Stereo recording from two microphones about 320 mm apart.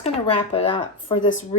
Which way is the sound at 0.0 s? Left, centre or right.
Centre.